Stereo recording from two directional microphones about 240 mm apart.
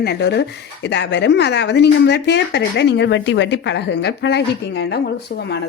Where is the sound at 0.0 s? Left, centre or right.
Left.